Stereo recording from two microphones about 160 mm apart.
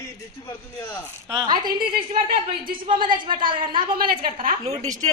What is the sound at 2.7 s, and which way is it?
Speech, 30° right (ahead or behind).